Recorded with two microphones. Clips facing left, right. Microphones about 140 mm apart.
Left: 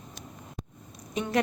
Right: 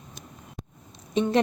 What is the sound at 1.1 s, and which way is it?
Speech, 25° right (ahead or behind).